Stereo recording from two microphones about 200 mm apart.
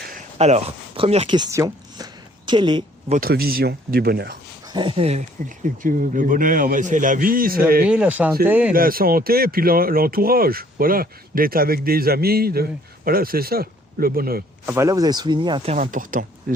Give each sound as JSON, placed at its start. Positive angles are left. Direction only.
{"t": 0.3, "sound": "a woman's voice", "side_deg": -30}
{"t": 3.2, "sound": "speech", "side_deg": -50}
{"t": 4.6, "sound": "speech", "side_deg": -20}
{"t": 7.9, "sound": "speech", "side_deg": -5}
{"t": 8.7, "sound": "speech", "side_deg": -45}
{"t": 14.7, "sound": "speech", "side_deg": -15}
{"t": 15.7, "sound": "speech", "side_deg": -40}